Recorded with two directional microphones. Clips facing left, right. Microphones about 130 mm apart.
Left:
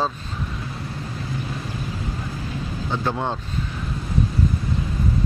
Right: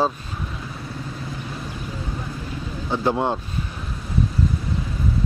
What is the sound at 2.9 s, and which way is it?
Speech, 15° right (ahead or behind).